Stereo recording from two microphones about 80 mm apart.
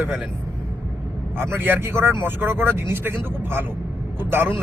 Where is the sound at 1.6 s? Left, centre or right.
Right.